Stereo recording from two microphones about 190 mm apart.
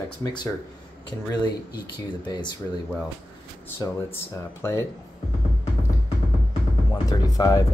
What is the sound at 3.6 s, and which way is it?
Speech, 10° left (ahead or behind).